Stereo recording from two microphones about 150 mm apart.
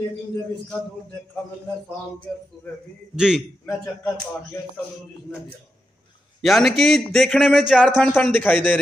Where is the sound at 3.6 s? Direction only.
20° left (ahead or behind).